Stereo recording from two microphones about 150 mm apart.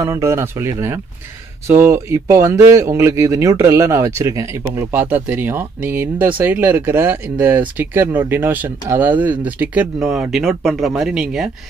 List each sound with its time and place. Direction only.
0.0 s speech: 20° right (ahead or behind)